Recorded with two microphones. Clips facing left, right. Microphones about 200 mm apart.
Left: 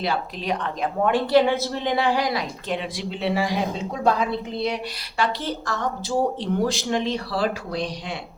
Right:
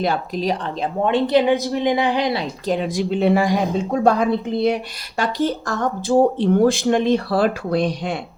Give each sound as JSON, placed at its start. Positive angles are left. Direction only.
{"t": 0.0, "sound": "a woman's voice", "side_deg": -40}